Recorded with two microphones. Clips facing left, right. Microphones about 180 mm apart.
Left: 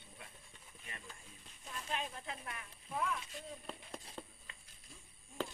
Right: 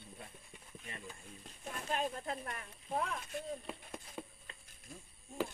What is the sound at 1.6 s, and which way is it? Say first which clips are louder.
Speech: right 5 dB; 50° right (ahead or behind).